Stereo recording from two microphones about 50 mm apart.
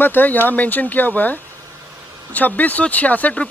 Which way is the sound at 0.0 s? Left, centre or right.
Left.